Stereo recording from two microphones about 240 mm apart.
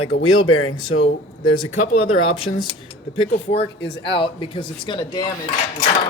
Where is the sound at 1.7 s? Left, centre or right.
Left.